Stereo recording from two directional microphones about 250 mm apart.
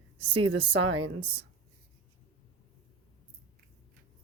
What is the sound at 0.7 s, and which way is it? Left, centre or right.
Speech, right.